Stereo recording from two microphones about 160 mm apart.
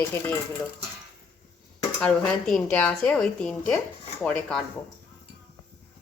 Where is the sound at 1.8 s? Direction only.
5° left (ahead or behind).